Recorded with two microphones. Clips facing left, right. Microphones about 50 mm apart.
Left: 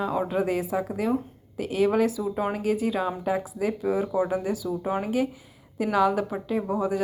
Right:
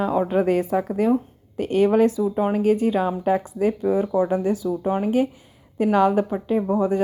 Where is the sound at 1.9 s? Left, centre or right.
Right.